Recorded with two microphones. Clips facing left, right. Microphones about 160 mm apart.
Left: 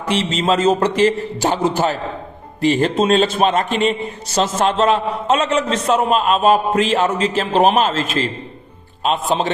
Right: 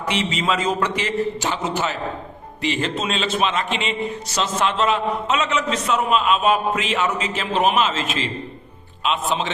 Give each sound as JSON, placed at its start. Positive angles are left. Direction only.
{"t": 0.4, "sound": "a man's voice", "side_deg": 35}